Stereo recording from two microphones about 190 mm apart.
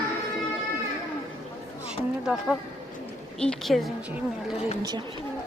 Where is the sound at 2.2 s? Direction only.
Centre (ahead or behind).